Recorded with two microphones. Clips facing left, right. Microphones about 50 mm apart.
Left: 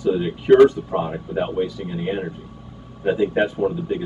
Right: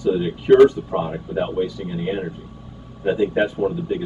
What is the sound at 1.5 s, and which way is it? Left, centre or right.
Speech, left.